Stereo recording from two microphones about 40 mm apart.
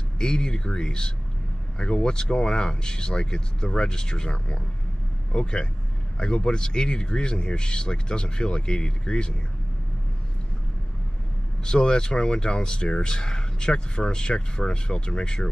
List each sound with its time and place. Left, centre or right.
0.2 s speech: centre
11.6 s speech: centre